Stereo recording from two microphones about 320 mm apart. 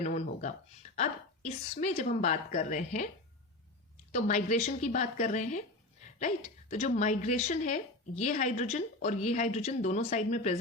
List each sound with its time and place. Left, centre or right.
0.0 s a woman's voice: left
4.1 s a woman's voice: left